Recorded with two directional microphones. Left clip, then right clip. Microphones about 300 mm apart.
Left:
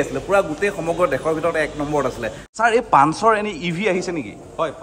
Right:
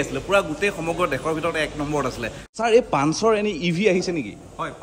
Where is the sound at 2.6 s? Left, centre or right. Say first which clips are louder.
Left 4 dB; centre.